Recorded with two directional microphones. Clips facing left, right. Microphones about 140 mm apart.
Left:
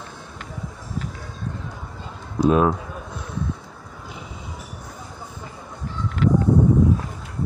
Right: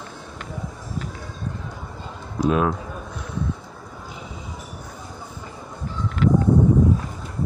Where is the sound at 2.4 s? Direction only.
30° left (ahead or behind).